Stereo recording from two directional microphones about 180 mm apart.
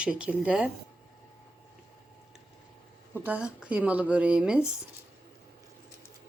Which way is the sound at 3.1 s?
10° right (ahead or behind).